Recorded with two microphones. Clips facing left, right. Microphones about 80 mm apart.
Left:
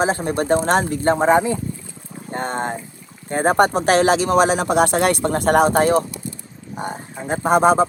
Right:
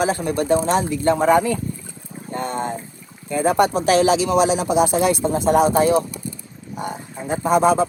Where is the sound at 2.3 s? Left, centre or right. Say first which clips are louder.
Left 1 dB; left.